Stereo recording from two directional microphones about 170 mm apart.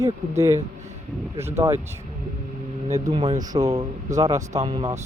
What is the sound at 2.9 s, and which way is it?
Speech, 25° right (ahead or behind).